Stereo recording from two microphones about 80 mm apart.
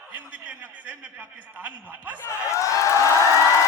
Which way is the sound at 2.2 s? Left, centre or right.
Left.